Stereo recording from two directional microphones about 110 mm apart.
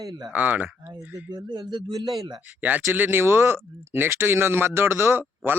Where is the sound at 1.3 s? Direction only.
40° right (ahead or behind).